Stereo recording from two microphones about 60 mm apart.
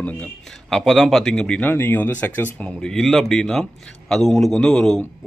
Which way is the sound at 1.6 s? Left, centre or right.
Left.